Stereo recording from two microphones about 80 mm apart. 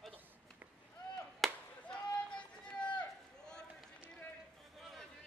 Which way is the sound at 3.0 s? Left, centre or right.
Centre.